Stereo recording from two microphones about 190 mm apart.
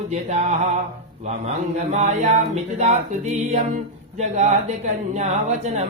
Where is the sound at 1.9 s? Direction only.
40° right (ahead or behind).